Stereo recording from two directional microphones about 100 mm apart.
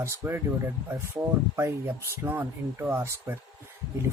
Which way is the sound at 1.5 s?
25° right (ahead or behind).